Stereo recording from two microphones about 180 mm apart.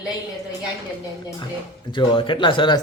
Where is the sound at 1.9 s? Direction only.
30° left (ahead or behind).